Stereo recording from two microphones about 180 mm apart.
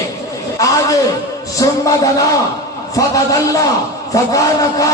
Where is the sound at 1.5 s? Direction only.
20° left (ahead or behind).